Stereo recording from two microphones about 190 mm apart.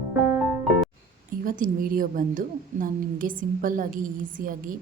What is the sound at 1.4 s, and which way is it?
A woman's voice, 45° right (ahead or behind).